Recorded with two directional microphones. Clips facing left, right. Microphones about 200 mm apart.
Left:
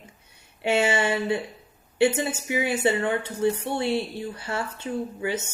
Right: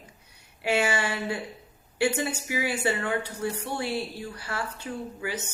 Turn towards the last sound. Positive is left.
turn(degrees=25)  # may be behind; listen again after turning